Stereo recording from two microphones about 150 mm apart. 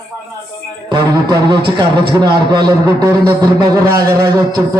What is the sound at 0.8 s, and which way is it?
A man's voice, 30° right (ahead or behind).